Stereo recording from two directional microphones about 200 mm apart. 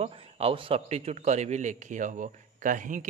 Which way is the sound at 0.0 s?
30° right (ahead or behind).